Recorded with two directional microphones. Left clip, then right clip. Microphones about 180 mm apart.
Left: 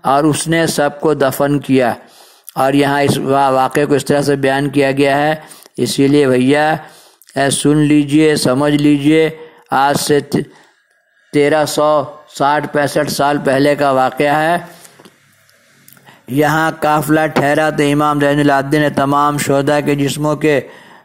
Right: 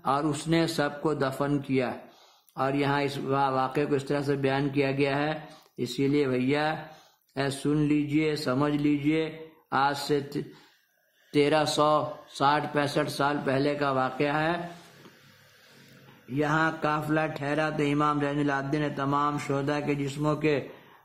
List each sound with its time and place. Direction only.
0.0 s a man's voice: 40° left (ahead or behind)
16.3 s speech: 45° left (ahead or behind)